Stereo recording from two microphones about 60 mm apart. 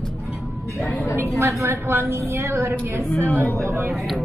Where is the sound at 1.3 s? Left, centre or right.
Right.